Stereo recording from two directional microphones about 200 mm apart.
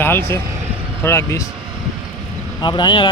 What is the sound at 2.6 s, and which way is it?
Speech, 20° left (ahead or behind).